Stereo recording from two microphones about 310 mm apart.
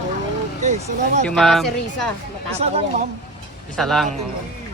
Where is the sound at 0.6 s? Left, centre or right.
Right.